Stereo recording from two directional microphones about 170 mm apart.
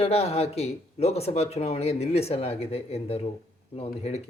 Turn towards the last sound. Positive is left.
turn(degrees=40)  # may be behind; listen again after turning